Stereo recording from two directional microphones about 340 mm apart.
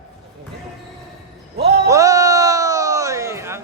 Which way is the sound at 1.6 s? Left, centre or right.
Right.